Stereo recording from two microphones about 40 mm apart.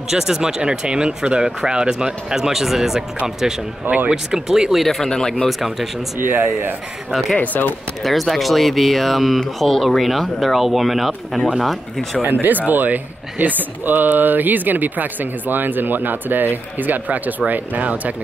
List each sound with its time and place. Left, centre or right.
0.1 s speech: centre
4.1 s speech: centre
4.8 s speech: centre
5.5 s speech: centre
6.2 s speech: right
7.1 s speech: centre
7.3 s speech: left
8.0 s speech: centre
12.3 s speech: right